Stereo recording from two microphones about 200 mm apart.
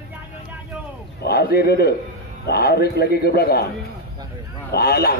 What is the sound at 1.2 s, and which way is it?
A man's voice, 50° left (ahead or behind).